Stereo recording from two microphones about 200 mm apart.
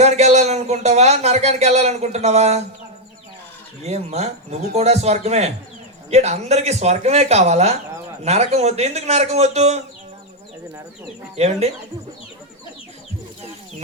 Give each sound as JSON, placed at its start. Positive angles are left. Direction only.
{"t": 0.0, "sound": "speech", "side_deg": -35}
{"t": 3.8, "sound": "speech", "side_deg": -30}
{"t": 11.3, "sound": "speech", "side_deg": -35}